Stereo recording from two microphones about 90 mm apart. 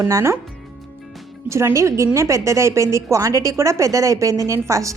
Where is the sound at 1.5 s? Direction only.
30° right (ahead or behind).